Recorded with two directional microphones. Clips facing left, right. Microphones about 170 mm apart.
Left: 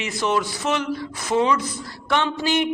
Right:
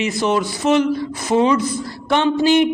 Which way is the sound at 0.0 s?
20° right (ahead or behind).